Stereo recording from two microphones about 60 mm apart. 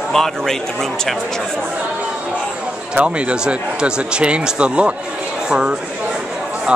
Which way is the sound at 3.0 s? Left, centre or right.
Centre.